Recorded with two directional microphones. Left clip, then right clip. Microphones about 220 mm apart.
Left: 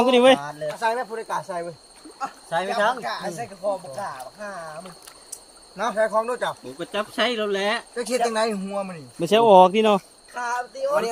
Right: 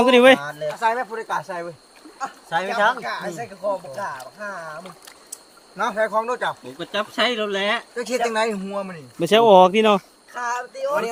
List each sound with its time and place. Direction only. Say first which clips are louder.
0.0 s speech: right 3 dB; 20° right (ahead or behind)
0.7 s speech: right 3 dB; 10° right (ahead or behind)